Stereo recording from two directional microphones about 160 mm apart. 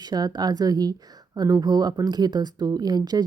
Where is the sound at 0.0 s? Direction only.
25° right (ahead or behind).